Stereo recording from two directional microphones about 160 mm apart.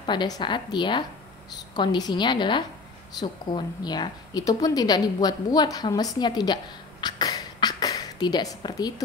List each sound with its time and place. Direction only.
0.0 s a woman's voice: 30° left (ahead or behind)